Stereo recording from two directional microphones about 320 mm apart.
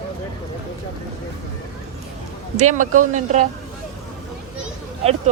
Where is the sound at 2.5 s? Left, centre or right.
Right.